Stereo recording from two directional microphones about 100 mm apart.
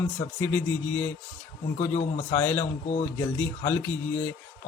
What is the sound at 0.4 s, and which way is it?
Speech, 25° left (ahead or behind).